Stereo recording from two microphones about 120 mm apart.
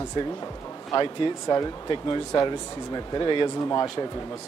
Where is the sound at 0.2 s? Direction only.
45° left (ahead or behind).